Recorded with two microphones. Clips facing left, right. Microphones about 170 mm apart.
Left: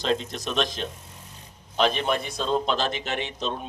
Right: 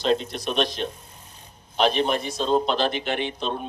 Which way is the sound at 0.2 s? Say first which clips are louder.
Right 2 dB; 45° left (ahead or behind).